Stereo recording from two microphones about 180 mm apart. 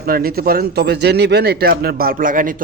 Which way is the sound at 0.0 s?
55° right (ahead or behind).